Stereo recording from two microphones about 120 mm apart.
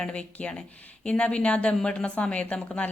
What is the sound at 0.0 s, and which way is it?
A woman's voice, 10° left (ahead or behind).